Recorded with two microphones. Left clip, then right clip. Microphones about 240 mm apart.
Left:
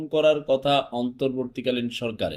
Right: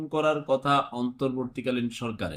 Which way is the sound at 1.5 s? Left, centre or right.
Right.